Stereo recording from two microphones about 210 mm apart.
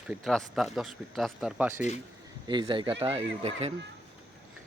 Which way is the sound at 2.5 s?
20° right (ahead or behind).